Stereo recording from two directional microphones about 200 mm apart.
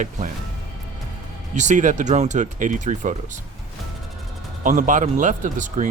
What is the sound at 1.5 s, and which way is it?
Speech, 35° right (ahead or behind).